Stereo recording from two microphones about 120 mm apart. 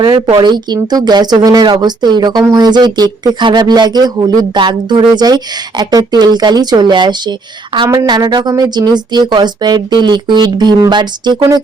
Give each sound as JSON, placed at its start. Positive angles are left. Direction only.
{"t": 0.3, "sound": "speech", "side_deg": -35}